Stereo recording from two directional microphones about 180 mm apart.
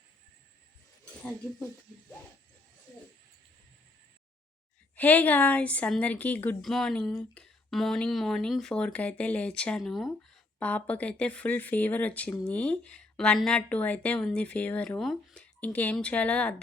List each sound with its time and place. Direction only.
4.9 s speech: 10° left (ahead or behind)